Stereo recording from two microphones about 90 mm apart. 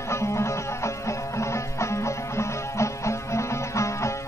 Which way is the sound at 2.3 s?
35° left (ahead or behind).